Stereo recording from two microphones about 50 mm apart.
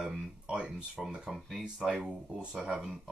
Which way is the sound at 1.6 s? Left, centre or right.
Centre.